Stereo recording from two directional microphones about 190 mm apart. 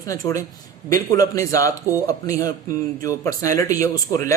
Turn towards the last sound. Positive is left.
turn(degrees=15)  # may be behind; listen again after turning